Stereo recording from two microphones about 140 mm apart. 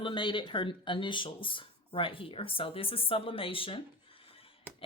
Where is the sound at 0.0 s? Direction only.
35° left (ahead or behind).